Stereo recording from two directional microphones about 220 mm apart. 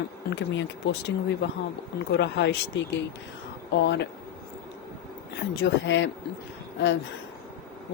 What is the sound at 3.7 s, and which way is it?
Speech, 50° left (ahead or behind).